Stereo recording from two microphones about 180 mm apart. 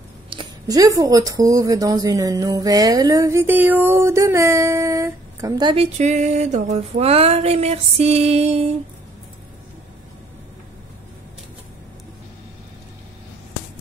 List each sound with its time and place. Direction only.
0.3 s speech: 25° right (ahead or behind)
5.9 s music: 40° right (ahead or behind)